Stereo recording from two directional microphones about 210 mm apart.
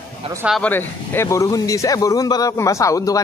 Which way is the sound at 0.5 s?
5° left (ahead or behind).